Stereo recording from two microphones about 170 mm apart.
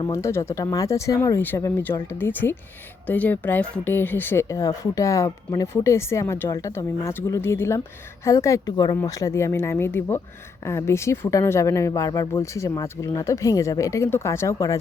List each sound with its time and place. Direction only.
0.1 s a woman's voice: 15° left (ahead or behind)